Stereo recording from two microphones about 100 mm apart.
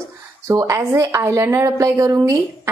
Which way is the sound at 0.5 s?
35° right (ahead or behind).